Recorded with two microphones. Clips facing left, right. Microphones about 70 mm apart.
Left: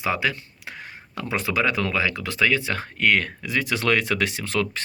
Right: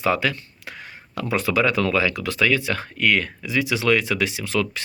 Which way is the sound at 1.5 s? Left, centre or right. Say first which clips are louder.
Right 3 dB; left.